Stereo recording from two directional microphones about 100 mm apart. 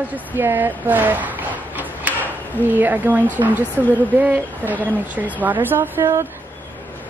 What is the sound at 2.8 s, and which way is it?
A woman's voice, 20° right (ahead or behind).